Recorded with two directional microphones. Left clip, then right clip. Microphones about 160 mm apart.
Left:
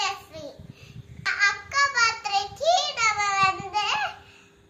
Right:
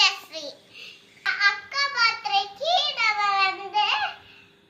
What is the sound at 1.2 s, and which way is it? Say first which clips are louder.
Child singing: right 1 dB; 30° left (ahead or behind).